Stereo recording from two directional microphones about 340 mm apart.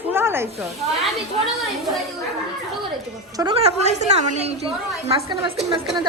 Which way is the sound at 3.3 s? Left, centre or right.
Centre.